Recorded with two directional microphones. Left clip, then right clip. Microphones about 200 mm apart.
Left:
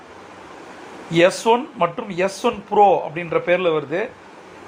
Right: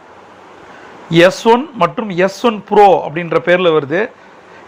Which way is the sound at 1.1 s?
45° right (ahead or behind).